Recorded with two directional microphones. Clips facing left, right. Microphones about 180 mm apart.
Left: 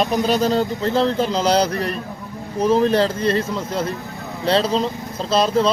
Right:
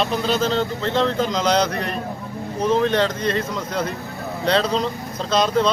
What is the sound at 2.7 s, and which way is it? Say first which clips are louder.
Speech: left 2 dB; 35° left (ahead or behind).